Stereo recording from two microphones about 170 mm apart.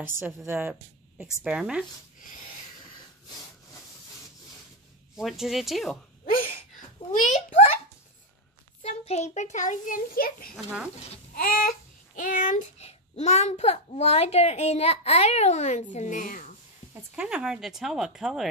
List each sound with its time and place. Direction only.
0.5 s speech: 10° right (ahead or behind)
5.1 s speech: 5° right (ahead or behind)
7.1 s a sound: 45° left (ahead or behind)
8.8 s a child's voice: 40° left (ahead or behind); by 10.5 s 60° left (ahead or behind)
10.5 s speech: 5° right (ahead or behind)
11.3 s a sound: 55° left (ahead or behind)
12.2 s a child's voice: 55° left (ahead or behind)
17.1 s speech: 5° right (ahead or behind)